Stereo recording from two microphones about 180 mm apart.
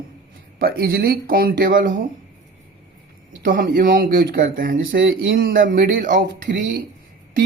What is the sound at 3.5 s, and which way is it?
Speech, 55° right (ahead or behind).